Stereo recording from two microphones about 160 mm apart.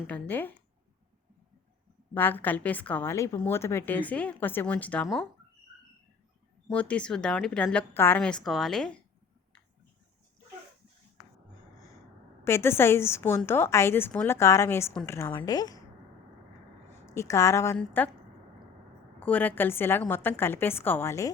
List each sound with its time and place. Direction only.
0.1 s a woman's voice: 10° left (ahead or behind)
2.1 s a woman's voice: 10° left (ahead or behind)
6.7 s a woman's voice: 5° left (ahead or behind)
12.5 s a woman's voice: 15° left (ahead or behind)
15.4 s a woman's voice: 25° left (ahead or behind)
17.2 s a woman's voice: 20° left (ahead or behind)
19.2 s a woman's voice: 10° left (ahead or behind)